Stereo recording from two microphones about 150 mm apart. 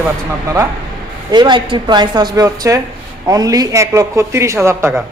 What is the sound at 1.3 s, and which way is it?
A man's voice, 30° right (ahead or behind).